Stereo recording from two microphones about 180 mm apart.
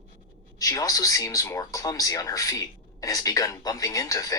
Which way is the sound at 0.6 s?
20° left (ahead or behind).